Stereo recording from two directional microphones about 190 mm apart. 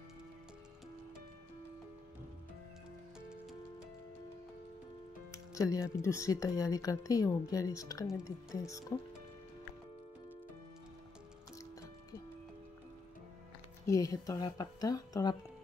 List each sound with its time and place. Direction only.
3.2 s music: 5° right (ahead or behind)
5.3 s music: 15° left (ahead or behind)
6.0 s a woman's voice: 15° left (ahead or behind)
13.8 s a woman's voice: 15° left (ahead or behind)